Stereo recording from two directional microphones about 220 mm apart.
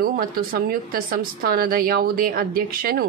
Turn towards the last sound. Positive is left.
turn(degrees=-40)  # may be behind; listen again after turning